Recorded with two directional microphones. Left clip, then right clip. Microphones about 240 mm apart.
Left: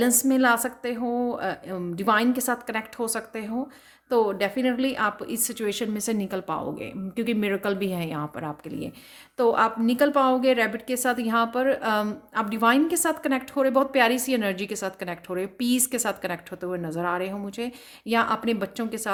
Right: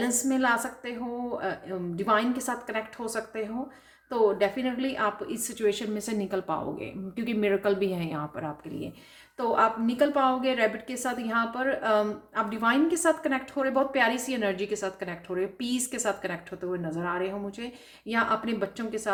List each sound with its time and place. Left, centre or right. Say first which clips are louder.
0.0 s a woman's voice: left 5 dB; left